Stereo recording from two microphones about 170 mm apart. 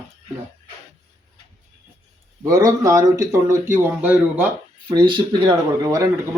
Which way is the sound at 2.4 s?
20° right (ahead or behind).